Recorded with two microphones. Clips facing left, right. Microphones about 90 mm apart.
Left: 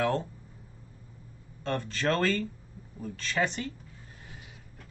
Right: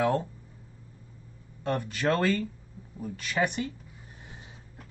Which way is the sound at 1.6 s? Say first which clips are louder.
Right 2 dB; 15° right (ahead or behind).